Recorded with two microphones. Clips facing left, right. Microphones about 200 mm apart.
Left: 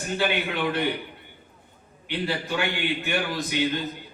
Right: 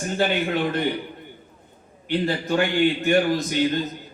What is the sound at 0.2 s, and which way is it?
Speech, 45° right (ahead or behind).